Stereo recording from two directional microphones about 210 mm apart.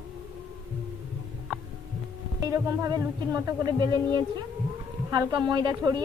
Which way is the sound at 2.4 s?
15° right (ahead or behind).